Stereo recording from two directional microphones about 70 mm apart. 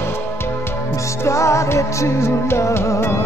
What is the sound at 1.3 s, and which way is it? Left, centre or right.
Music, left.